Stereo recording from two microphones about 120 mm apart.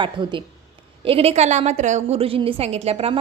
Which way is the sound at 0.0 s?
40° right (ahead or behind).